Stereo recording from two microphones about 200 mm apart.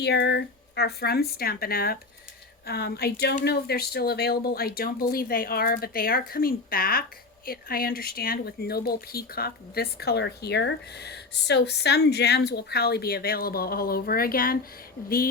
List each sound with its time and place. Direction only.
0.0 s speech: 55° left (ahead or behind)